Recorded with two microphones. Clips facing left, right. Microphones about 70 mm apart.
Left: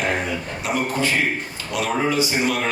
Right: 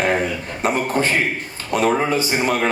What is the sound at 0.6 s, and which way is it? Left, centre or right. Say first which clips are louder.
A man's voice: right 4 dB; right.